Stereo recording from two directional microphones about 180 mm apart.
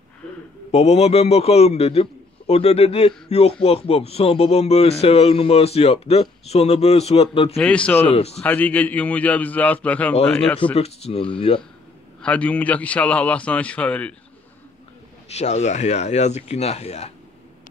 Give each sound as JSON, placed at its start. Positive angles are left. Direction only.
{"t": 0.7, "sound": "a man's voice", "side_deg": 35}
{"t": 7.5, "sound": "a man's voice", "side_deg": 5}
{"t": 10.6, "sound": "a man's voice", "side_deg": 35}
{"t": 12.2, "sound": "a man's voice", "side_deg": 5}
{"t": 15.3, "sound": "a man's voice", "side_deg": 40}